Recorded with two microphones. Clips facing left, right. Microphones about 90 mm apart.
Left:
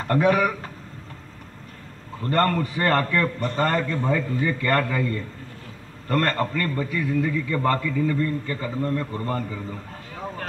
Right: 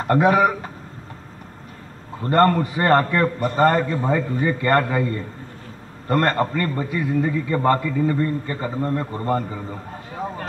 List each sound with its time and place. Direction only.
0.0 s a man's voice: 30° right (ahead or behind)
2.2 s a man's voice: 30° right (ahead or behind)